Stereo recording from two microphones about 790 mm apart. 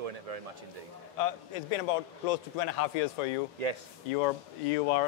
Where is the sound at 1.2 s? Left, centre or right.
Left.